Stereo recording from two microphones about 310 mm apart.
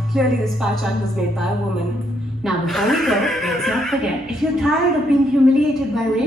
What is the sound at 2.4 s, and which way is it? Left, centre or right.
Speech, centre.